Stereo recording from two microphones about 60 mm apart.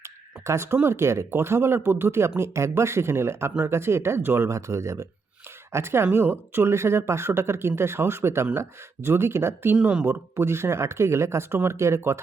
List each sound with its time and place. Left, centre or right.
0.0 s a sound: right
0.8 s speech: right
4.5 s speech: right
9.8 s speech: right
10.1 s speech: right